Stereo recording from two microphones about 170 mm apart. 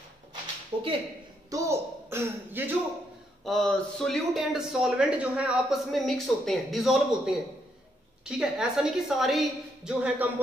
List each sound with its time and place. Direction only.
0.7 s a sound: 30° right (ahead or behind)
1.5 s speech: 20° right (ahead or behind)
3.4 s speech: centre (ahead or behind)
8.4 s speech: 5° right (ahead or behind)